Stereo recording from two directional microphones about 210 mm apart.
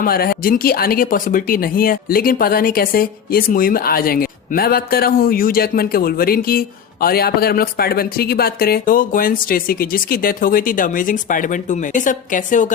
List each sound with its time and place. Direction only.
0.0 s speech: 45° left (ahead or behind)